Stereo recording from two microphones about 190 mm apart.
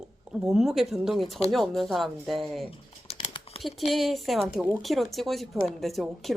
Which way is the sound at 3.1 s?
30° left (ahead or behind).